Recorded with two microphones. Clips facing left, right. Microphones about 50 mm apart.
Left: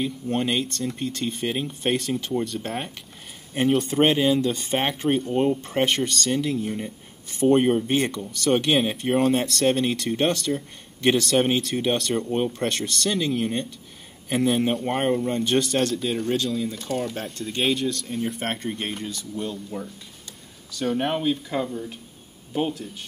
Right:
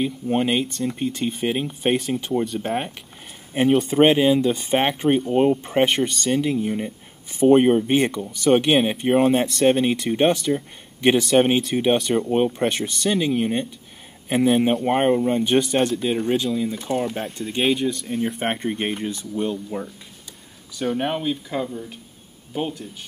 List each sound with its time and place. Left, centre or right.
0.0 s speech: centre
20.7 s speech: centre